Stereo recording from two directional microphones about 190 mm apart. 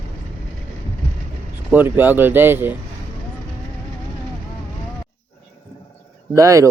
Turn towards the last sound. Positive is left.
turn(degrees=-15)  # may be behind; listen again after turning